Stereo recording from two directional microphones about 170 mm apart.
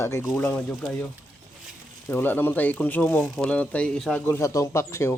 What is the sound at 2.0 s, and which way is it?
Speech, 10° left (ahead or behind).